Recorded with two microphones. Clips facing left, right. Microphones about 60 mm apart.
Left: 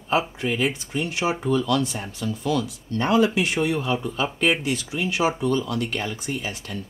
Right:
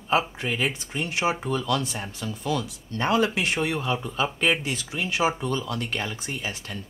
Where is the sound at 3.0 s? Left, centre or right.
Right.